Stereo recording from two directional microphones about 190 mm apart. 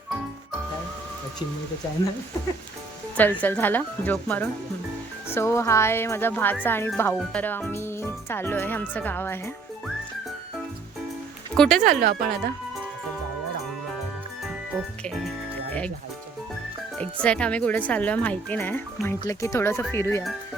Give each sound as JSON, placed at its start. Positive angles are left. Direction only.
{"t": 3.2, "sound": "speech", "side_deg": 10}
{"t": 11.5, "sound": "speech", "side_deg": 5}
{"t": 11.9, "sound": "speech", "side_deg": -50}
{"t": 17.0, "sound": "speech", "side_deg": 5}